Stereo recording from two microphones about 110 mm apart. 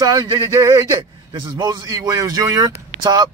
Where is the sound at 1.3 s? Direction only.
40° right (ahead or behind).